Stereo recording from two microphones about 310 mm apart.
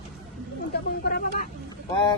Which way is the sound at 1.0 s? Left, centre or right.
Left.